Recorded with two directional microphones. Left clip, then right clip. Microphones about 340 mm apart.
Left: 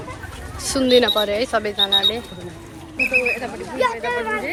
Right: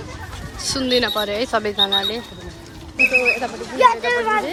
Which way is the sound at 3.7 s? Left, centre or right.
Right.